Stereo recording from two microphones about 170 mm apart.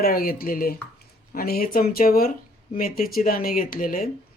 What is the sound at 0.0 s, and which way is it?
Speech, 60° left (ahead or behind).